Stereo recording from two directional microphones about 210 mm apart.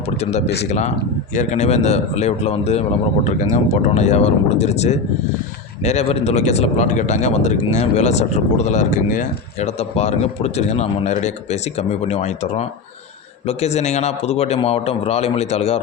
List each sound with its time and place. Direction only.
0.3 s speech: 30° left (ahead or behind)